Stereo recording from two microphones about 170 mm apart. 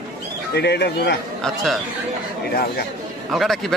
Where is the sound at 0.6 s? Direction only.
75° left (ahead or behind).